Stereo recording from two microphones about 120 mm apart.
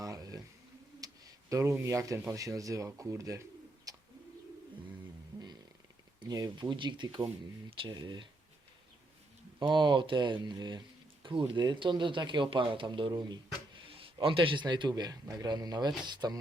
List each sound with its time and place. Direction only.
0.0 s a sound: 30° right (ahead or behind)
1.0 s speech: 25° right (ahead or behind)
3.9 s bird: 30° right (ahead or behind)
6.1 s speech: 35° right (ahead or behind)
9.6 s speech: 40° right (ahead or behind)